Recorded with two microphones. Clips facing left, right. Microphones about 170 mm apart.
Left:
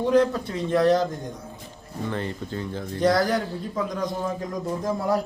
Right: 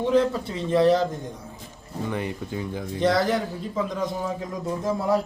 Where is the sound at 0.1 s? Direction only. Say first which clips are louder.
Left 2 dB; centre (ahead or behind).